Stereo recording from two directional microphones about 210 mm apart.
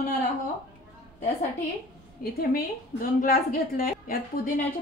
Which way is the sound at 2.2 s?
45° left (ahead or behind).